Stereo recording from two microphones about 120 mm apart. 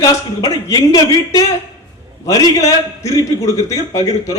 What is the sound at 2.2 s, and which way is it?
A man's voice, 25° left (ahead or behind).